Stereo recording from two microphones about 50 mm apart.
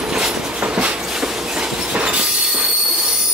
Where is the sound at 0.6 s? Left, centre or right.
Right.